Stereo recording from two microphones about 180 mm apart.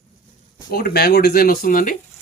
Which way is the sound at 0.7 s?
60° left (ahead or behind).